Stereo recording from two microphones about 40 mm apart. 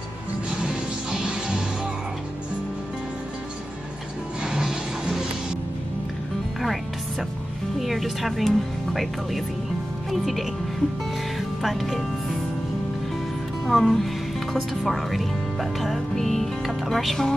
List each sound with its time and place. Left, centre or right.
0.6 s music: right
4.4 s a sound: centre
6.6 s music: centre
7.8 s speech: centre
13.7 s speech: centre